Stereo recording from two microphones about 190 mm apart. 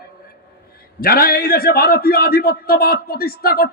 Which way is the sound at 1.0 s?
50° left (ahead or behind).